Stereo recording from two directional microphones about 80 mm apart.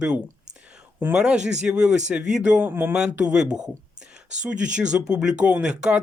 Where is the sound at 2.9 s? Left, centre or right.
Centre.